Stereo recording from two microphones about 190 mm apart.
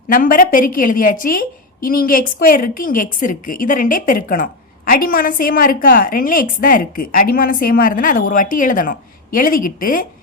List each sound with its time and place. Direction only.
0.1 s a woman's voice: 45° left (ahead or behind)